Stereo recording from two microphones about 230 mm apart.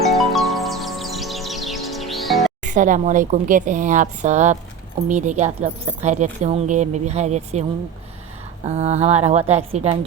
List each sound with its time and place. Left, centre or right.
0.0 s music: centre
2.6 s a woman's voice: right
8.6 s speech: right